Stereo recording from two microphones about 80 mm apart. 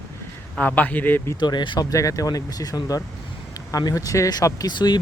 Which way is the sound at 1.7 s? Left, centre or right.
Left.